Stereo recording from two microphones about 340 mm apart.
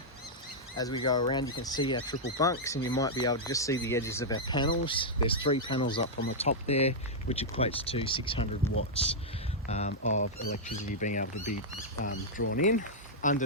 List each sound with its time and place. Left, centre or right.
0.8 s speech: centre
8.6 s speech: centre
9.6 s speech: centre
12.1 s speech: left
12.5 s speech: left